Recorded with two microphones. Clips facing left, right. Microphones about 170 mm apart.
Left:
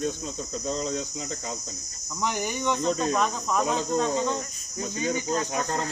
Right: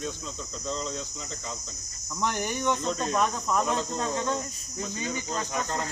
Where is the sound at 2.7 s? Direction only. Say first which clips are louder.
Left 3 dB; 5° left (ahead or behind).